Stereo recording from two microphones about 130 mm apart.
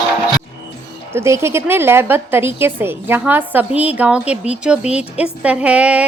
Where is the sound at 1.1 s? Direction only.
20° right (ahead or behind).